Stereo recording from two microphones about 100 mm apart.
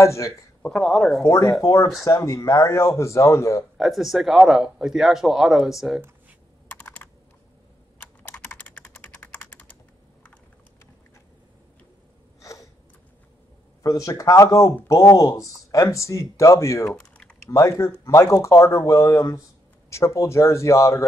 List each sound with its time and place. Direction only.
0.0 s speech: 30° left (ahead or behind)
0.6 s speech: 5° left (ahead or behind)
1.2 s speech: 35° left (ahead or behind)
3.7 s speech: 5° right (ahead or behind)
6.8 s computer keyboard: 15° left (ahead or behind)
8.5 s typing: 15° left (ahead or behind)
12.4 s gasp: 35° left (ahead or behind)
13.8 s speech: 35° left (ahead or behind)
16.9 s typing: 10° left (ahead or behind)
17.5 s speech: 35° left (ahead or behind)